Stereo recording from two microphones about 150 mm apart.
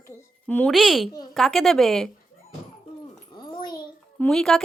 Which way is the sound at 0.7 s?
Centre (ahead or behind).